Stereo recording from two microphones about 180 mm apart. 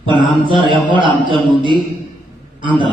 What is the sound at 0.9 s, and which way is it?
Music, 25° right (ahead or behind).